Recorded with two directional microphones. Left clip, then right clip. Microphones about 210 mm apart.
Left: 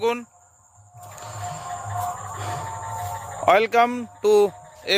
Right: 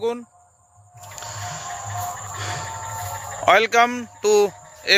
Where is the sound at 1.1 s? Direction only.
5° left (ahead or behind).